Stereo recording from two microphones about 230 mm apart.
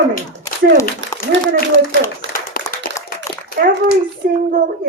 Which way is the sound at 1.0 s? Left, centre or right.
Right.